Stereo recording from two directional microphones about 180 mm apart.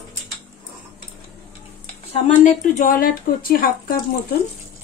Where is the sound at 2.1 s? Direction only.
40° left (ahead or behind).